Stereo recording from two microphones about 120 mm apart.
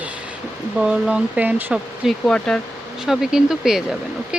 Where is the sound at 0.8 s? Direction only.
10° right (ahead or behind).